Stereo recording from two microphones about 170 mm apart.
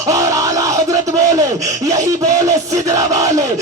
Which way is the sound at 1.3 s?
20° right (ahead or behind).